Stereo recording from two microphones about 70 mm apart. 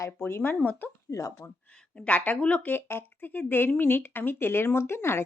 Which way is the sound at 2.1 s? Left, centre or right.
Left.